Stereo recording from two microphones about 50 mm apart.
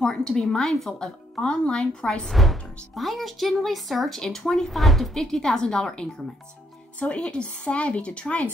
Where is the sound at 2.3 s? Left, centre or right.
Centre.